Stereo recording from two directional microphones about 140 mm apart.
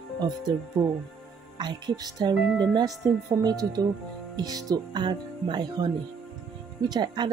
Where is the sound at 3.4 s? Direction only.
30° right (ahead or behind).